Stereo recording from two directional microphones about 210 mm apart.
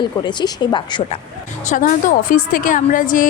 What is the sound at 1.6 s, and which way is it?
A woman's voice, 40° left (ahead or behind).